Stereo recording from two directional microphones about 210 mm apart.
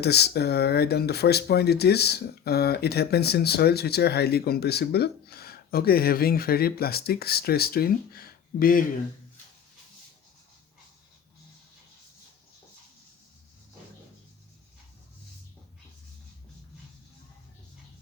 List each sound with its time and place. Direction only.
0.0 s speech: 50° left (ahead or behind)